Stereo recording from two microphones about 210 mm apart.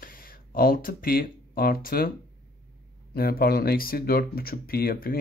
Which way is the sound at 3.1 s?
45° left (ahead or behind).